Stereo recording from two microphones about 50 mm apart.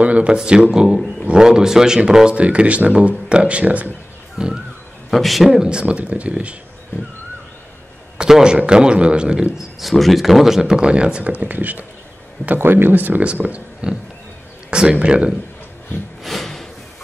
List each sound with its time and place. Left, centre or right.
0.0 s speech: right
0.4 s speech: centre
4.4 s speech: centre
5.1 s a man's voice: centre
5.6 s speech: centre
8.2 s speech: centre
9.6 s speech: centre; by 11.3 s right
11.3 s speech: right
13.2 s speech: right
14.7 s a sound: centre
15.0 s speech: right
16.2 s a sound: centre